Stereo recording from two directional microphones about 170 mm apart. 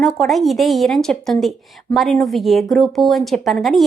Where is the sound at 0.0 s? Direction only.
Centre (ahead or behind).